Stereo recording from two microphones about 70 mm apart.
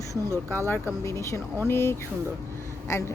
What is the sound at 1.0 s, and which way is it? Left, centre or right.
Speech, left.